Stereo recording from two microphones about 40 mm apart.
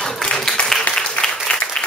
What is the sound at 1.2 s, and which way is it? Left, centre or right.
Applause, left.